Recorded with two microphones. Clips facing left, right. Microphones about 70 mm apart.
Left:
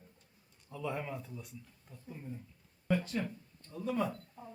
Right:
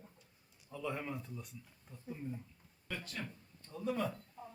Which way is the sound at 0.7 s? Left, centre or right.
Centre.